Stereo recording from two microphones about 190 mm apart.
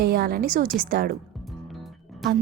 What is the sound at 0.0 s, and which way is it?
A woman's voice, 55° right (ahead or behind).